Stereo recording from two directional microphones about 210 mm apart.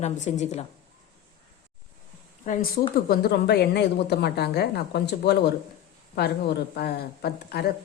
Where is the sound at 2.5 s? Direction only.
35° left (ahead or behind).